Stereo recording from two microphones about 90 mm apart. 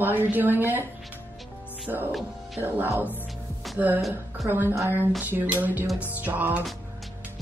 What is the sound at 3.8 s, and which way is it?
Speech, 20° right (ahead or behind).